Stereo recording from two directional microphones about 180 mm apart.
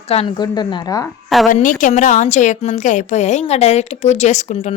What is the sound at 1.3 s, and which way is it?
Speech, centre (ahead or behind).